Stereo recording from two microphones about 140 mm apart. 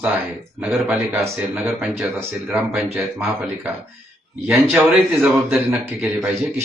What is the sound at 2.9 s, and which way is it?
Speech, 15° right (ahead or behind).